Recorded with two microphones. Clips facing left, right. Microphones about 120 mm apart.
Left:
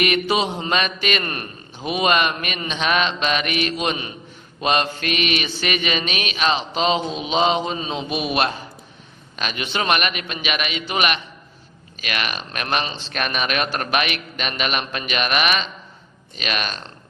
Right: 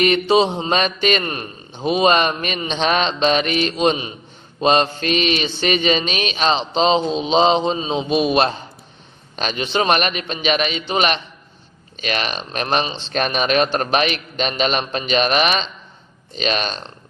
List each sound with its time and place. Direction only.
0.0 s speech: 30° right (ahead or behind)
1.2 s speech: 20° right (ahead or behind)
4.6 s mantra: 30° right (ahead or behind)
9.3 s speech: 30° right (ahead or behind)
16.3 s mantra: 30° right (ahead or behind)